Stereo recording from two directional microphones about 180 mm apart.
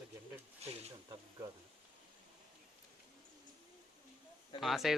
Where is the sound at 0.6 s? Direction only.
35° right (ahead or behind).